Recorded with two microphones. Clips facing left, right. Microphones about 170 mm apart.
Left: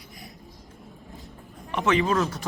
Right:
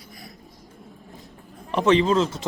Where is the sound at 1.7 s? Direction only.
30° right (ahead or behind).